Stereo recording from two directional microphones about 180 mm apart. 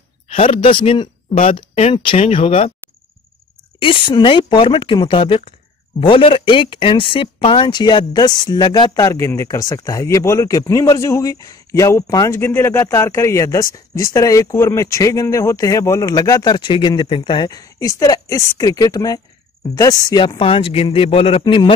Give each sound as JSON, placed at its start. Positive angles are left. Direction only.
{"t": 0.3, "sound": "speech", "side_deg": 30}
{"t": 3.8, "sound": "speech", "side_deg": 25}